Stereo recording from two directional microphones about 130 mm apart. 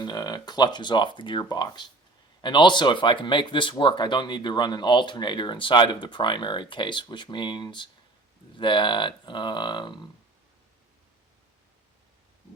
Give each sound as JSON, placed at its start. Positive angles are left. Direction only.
{"t": 0.0, "sound": "speech", "side_deg": 30}